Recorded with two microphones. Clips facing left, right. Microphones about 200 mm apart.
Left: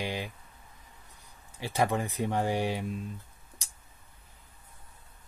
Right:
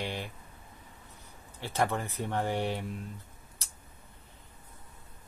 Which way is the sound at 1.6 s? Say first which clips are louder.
Left 2 dB; 10° left (ahead or behind).